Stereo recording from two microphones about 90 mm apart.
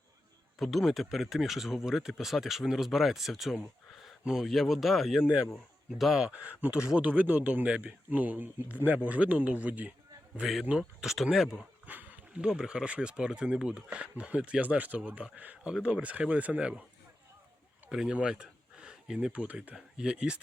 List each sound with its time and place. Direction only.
0.6 s speech: centre (ahead or behind); by 9.9 s 15° right (ahead or behind)
10.3 s speech: 5° right (ahead or behind)
11.9 s speech: 15° right (ahead or behind)
17.8 s speech: 10° right (ahead or behind)